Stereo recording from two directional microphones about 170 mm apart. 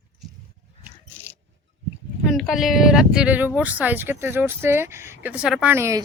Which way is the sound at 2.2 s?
Centre (ahead or behind).